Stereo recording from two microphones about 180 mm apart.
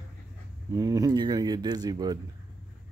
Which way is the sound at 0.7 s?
20° right (ahead or behind).